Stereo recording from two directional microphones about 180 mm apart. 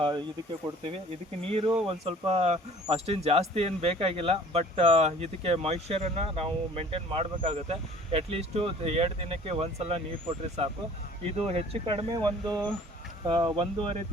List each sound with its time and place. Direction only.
0.0 s speech: 25° right (ahead or behind)